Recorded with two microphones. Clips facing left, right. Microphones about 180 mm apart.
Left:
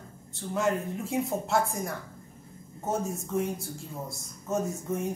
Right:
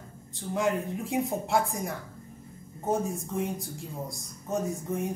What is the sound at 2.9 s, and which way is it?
A man's voice, 15° right (ahead or behind).